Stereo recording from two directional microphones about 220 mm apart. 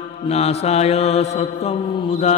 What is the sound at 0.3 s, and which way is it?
Mantra, 30° left (ahead or behind).